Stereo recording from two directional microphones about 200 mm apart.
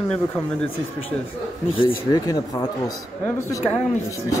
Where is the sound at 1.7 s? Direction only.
25° left (ahead or behind).